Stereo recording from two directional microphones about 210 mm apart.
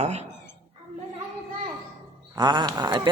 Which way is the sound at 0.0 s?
30° right (ahead or behind).